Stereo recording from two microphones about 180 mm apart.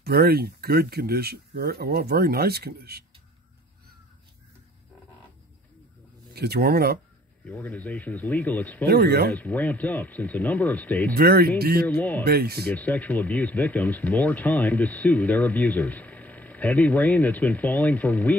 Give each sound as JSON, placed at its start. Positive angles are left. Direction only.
{"t": 0.0, "sound": "speech", "side_deg": -60}
{"t": 6.3, "sound": "speech", "side_deg": -65}
{"t": 7.4, "sound": "speech", "side_deg": 10}
{"t": 8.8, "sound": "speech", "side_deg": -65}
{"t": 9.3, "sound": "speech", "side_deg": 10}
{"t": 11.1, "sound": "speech", "side_deg": -55}
{"t": 11.9, "sound": "speech", "side_deg": 10}
{"t": 12.3, "sound": "speech", "side_deg": -60}
{"t": 12.7, "sound": "speech", "side_deg": 10}